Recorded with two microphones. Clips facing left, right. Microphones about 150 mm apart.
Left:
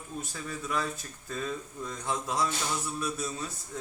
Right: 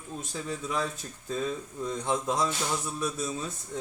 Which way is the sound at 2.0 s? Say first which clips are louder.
Right 2 dB; 20° right (ahead or behind).